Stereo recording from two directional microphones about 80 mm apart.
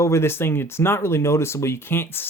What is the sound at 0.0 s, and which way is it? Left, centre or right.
Speech, left.